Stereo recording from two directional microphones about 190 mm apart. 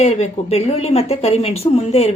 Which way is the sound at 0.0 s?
35° left (ahead or behind).